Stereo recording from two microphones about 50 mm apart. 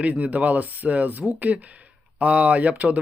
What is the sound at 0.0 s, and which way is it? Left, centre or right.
Speech, right.